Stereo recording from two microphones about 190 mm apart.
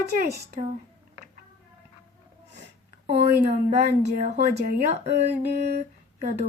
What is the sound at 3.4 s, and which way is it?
Speech, 35° right (ahead or behind).